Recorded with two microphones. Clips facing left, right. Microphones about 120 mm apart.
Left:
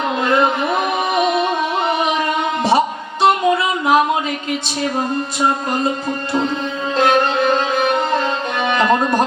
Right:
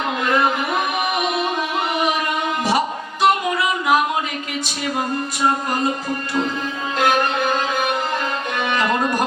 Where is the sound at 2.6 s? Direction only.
30° left (ahead or behind).